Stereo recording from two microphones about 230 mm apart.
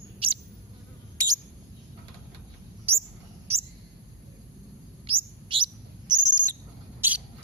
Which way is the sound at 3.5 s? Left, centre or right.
Right.